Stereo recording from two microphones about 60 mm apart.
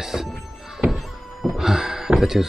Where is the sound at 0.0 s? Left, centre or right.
Centre.